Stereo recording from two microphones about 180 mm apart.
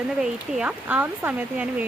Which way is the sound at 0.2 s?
5° right (ahead or behind).